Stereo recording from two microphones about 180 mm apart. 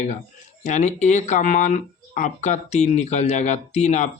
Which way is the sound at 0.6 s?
40° left (ahead or behind).